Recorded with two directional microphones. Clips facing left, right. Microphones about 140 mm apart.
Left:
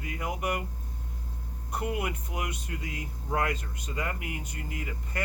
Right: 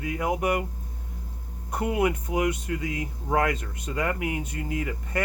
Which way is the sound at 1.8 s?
90° right.